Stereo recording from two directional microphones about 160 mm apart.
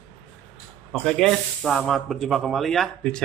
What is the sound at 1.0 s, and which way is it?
Speech, centre (ahead or behind).